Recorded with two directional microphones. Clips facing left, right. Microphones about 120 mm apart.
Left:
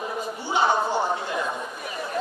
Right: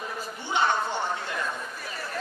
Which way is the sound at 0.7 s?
25° left (ahead or behind).